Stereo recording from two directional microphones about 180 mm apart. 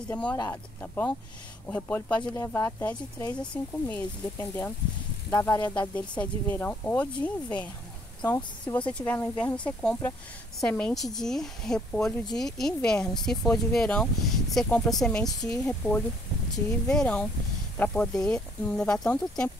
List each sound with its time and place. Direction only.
0.1 s speech: 5° left (ahead or behind)
15.2 s speech: 20° left (ahead or behind)
15.6 s speech: 10° left (ahead or behind)